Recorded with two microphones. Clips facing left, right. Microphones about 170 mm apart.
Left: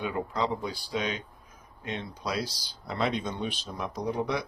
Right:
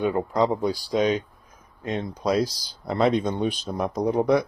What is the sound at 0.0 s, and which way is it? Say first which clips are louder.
Speech: right 8 dB; 40° right (ahead or behind).